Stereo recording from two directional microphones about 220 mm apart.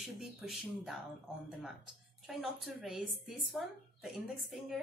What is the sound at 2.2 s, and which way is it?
Speech, centre (ahead or behind).